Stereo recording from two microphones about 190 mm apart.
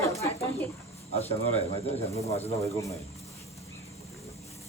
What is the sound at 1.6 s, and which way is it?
Speech, 35° left (ahead or behind).